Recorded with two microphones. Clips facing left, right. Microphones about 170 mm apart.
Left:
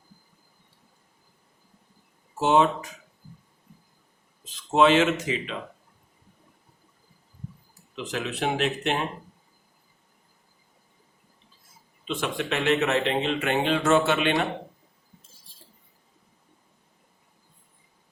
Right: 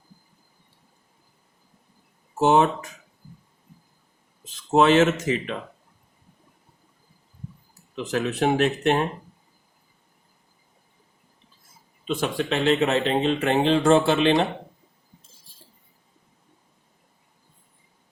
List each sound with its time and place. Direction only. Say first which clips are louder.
2.4 s speech: right 2 dB; 45° right (ahead or behind)
4.7 s speech: right 2 dB; 45° right (ahead or behind)
7.9 s speech: right 6 dB; 45° right (ahead or behind)
12.0 s speech: right 3 dB; 40° right (ahead or behind)